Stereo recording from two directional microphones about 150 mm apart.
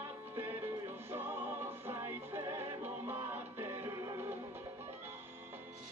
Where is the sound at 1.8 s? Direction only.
15° right (ahead or behind).